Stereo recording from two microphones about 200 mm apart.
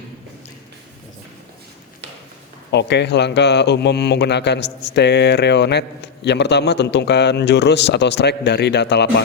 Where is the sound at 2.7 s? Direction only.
60° left (ahead or behind).